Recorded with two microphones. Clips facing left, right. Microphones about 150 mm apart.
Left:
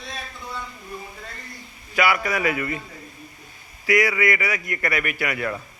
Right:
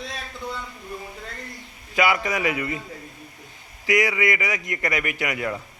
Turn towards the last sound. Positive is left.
turn(degrees=-20)  # may be behind; listen again after turning